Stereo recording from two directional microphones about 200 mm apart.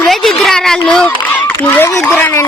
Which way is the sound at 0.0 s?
Centre (ahead or behind).